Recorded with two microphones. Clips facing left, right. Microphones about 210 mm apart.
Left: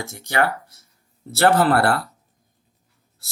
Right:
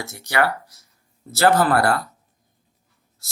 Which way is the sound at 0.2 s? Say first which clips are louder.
Even; 55° left (ahead or behind).